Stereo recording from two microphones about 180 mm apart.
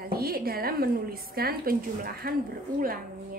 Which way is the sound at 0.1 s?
55° right (ahead or behind).